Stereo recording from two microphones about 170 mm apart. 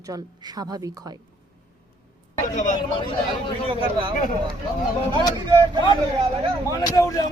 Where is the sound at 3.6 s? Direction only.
30° right (ahead or behind).